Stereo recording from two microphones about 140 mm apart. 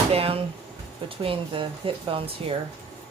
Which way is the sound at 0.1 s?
45° right (ahead or behind).